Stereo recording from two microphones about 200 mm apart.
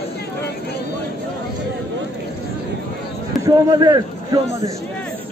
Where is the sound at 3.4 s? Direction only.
20° right (ahead or behind).